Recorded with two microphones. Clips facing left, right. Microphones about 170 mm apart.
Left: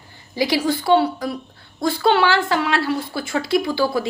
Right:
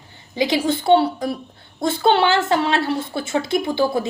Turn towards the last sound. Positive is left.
turn(degrees=-20)  # may be behind; listen again after turning